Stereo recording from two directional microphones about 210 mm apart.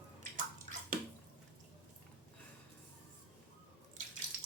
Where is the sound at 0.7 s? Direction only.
35° right (ahead or behind).